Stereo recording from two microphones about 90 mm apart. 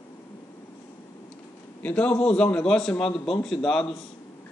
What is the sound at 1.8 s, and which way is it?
A man's voice, 15° left (ahead or behind).